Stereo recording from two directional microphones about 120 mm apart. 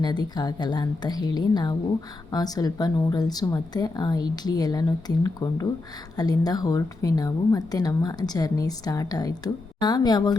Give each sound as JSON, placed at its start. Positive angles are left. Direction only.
{"t": 0.0, "sound": "a woman's voice", "side_deg": 35}